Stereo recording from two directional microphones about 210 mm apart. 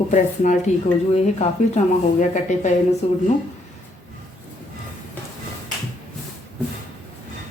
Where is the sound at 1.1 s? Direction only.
30° left (ahead or behind).